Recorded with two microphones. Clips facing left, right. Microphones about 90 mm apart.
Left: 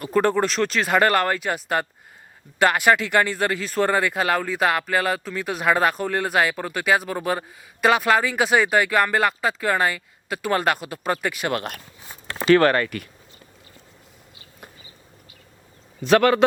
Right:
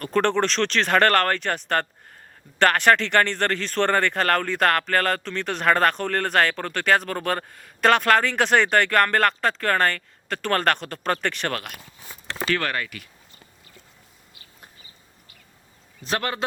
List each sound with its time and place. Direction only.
0.0 s speech: 10° left (ahead or behind)
12.5 s speech: 40° left (ahead or behind)
16.0 s a man's voice: 90° left